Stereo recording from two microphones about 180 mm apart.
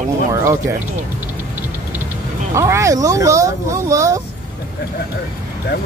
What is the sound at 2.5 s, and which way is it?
Speech, 15° right (ahead or behind).